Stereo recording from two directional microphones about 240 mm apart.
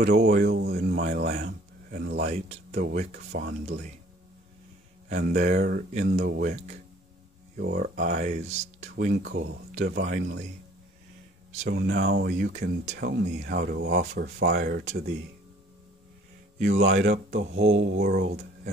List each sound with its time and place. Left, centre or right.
0.0 s speech: right
2.2 s speech: right
5.1 s speech: right
8.8 s speech: right
11.7 s speech: right
17.0 s mantra: right
18.0 s speech: right